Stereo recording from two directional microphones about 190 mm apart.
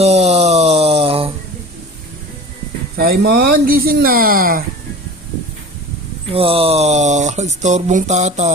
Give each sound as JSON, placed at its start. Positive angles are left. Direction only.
{"t": 0.0, "sound": "a sound", "side_deg": -35}
{"t": 3.0, "sound": "speech", "side_deg": -50}
{"t": 6.3, "sound": "speech", "side_deg": -30}